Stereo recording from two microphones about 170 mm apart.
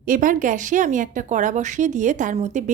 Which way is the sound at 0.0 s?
55° right (ahead or behind).